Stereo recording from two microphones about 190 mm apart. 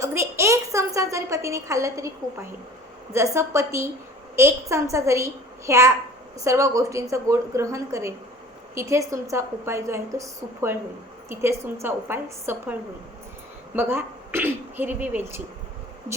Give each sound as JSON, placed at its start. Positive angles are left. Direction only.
{"t": 0.0, "sound": "a woman's voice", "side_deg": -15}
{"t": 13.7, "sound": "speech", "side_deg": -10}